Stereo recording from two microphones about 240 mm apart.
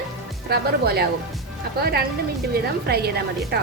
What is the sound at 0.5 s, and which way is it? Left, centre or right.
A woman's voice, right.